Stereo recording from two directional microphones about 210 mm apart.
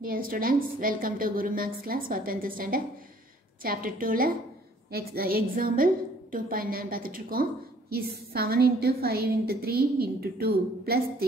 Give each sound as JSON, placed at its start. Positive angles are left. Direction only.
{"t": 0.0, "sound": "a woman's voice", "side_deg": -45}